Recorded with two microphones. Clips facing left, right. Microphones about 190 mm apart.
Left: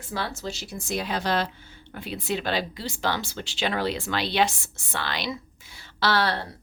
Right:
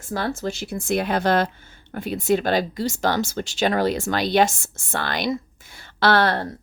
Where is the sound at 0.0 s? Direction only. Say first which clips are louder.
Right 6 dB; 45° right (ahead or behind).